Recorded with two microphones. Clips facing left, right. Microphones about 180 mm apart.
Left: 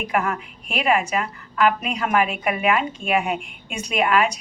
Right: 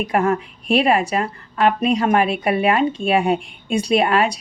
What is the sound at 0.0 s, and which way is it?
A woman's voice, 35° right (ahead or behind).